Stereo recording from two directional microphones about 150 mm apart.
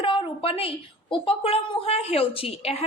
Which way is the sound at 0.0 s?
35° left (ahead or behind).